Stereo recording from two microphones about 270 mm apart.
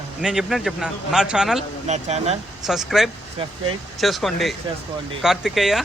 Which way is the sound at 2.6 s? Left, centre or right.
Centre.